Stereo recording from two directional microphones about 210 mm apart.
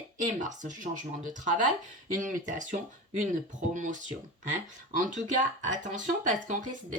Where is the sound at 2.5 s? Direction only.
40° right (ahead or behind).